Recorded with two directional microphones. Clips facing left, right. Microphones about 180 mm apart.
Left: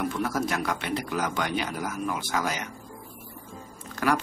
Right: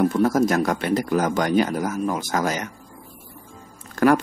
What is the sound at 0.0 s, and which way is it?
Speech, 45° right (ahead or behind).